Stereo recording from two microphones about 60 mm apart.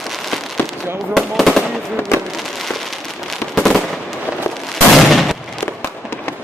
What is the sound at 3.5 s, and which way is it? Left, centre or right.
Fireworks, centre.